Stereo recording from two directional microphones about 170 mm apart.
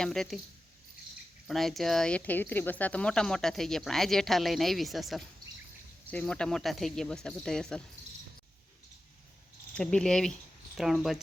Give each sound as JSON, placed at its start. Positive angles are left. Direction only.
{"t": 0.0, "sound": "speech", "side_deg": 0}
{"t": 1.5, "sound": "speech", "side_deg": 0}
{"t": 9.7, "sound": "speech", "side_deg": 5}